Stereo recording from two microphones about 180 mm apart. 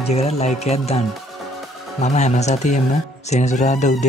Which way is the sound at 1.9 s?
40° left (ahead or behind).